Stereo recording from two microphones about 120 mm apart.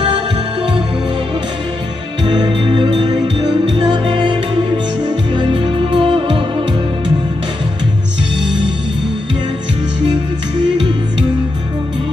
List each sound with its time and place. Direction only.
2.2 s music: 40° right (ahead or behind)